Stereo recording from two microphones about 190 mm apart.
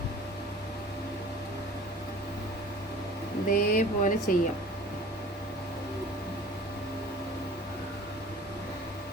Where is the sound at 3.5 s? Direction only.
45° left (ahead or behind).